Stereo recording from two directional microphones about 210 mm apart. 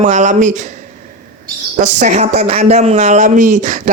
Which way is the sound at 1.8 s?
35° right (ahead or behind).